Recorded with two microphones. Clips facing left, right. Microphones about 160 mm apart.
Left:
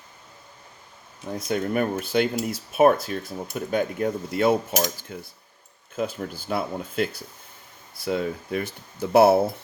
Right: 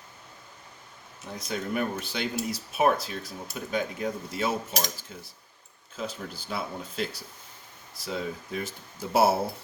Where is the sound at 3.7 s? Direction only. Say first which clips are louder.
Left 5 dB; 55° left (ahead or behind).